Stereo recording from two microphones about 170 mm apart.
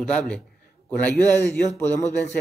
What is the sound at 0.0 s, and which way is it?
Speech, 5° left (ahead or behind).